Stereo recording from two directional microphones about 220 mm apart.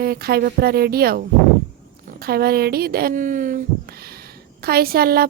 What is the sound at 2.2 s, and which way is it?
Speech, 45° right (ahead or behind).